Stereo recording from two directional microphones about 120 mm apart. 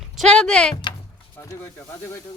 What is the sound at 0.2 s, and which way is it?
Speech, 5° left (ahead or behind).